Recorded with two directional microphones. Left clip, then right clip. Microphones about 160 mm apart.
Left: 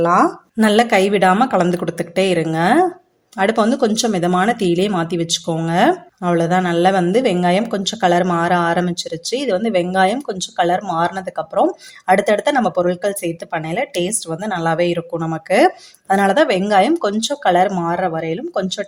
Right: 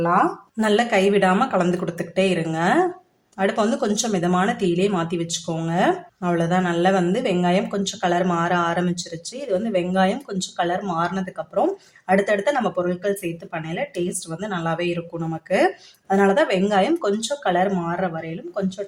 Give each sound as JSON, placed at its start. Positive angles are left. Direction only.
{"t": 0.0, "sound": "a woman's voice", "side_deg": 45}
{"t": 0.5, "sound": "speech", "side_deg": 35}